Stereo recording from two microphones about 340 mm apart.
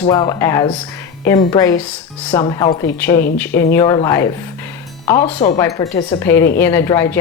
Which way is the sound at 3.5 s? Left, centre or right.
Left.